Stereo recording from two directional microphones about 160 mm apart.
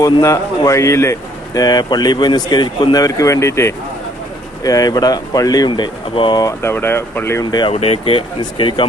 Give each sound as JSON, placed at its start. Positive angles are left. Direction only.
{"t": 0.0, "sound": "speech", "side_deg": 20}
{"t": 7.6, "sound": "speech", "side_deg": 40}